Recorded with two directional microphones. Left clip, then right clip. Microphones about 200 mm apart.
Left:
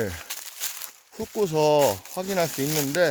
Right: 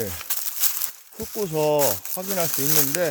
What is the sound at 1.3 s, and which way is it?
Speech, 35° left (ahead or behind).